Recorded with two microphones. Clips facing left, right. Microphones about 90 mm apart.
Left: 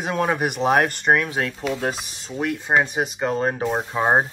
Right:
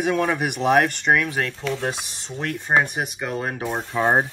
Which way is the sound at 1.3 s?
15° left (ahead or behind).